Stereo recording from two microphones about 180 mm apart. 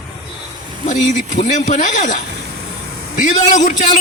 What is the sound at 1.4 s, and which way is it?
Speech, 40° left (ahead or behind).